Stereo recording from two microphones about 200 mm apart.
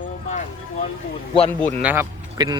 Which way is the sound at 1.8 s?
10° right (ahead or behind).